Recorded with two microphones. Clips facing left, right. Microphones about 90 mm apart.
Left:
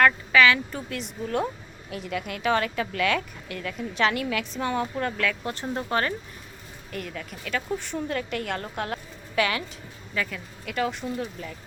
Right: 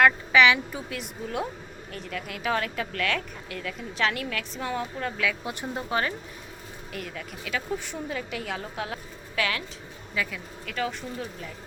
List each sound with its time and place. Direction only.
0.0 s a woman's voice: 20° right (ahead or behind)
0.7 s a woman's voice: 5° right (ahead or behind)